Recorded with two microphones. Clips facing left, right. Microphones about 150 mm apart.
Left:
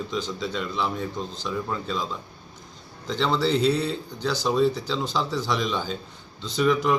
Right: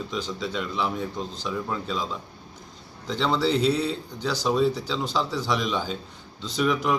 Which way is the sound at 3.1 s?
5° right (ahead or behind).